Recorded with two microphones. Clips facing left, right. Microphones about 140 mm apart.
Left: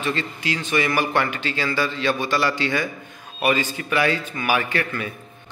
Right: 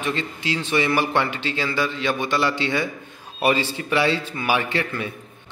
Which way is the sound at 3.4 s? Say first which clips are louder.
Right 1 dB; 35° right (ahead or behind).